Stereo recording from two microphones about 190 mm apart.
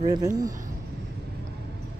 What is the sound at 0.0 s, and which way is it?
Speech, 20° right (ahead or behind).